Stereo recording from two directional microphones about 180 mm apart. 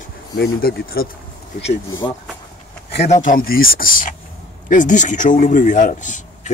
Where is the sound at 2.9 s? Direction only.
40° left (ahead or behind).